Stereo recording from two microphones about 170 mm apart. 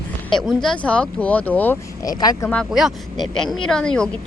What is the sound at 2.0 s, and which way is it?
Speech, 20° left (ahead or behind).